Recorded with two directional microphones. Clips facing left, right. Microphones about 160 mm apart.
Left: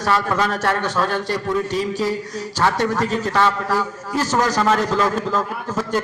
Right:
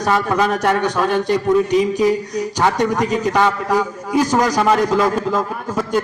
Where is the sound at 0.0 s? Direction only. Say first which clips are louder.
Right 3 dB; 20° right (ahead or behind).